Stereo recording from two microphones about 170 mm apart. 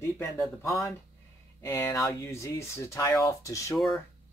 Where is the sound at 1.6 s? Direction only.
15° left (ahead or behind).